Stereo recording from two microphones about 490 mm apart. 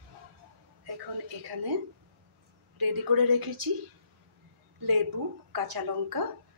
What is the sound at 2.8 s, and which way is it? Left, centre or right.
Speech, right.